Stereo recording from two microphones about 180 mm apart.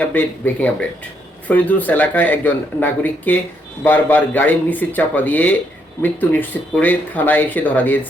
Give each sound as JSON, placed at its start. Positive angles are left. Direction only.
{"t": 0.0, "sound": "speech", "side_deg": 10}